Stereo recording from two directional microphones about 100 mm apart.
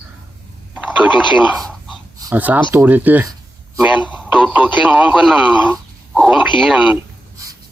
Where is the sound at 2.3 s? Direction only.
15° right (ahead or behind).